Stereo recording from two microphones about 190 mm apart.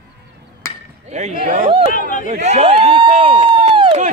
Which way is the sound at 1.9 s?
45° left (ahead or behind).